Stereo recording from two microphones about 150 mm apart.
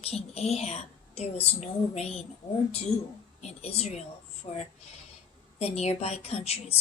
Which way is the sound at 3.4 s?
45° left (ahead or behind).